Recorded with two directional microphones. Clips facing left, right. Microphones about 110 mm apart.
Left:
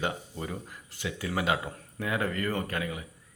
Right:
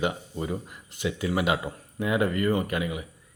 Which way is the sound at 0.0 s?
15° right (ahead or behind).